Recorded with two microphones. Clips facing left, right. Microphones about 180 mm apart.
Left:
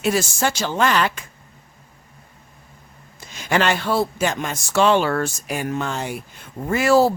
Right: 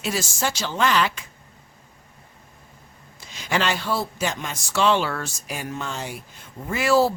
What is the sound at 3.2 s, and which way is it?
Speech, 50° left (ahead or behind).